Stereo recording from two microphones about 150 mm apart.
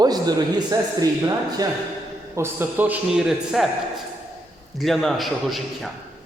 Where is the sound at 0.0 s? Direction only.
25° right (ahead or behind).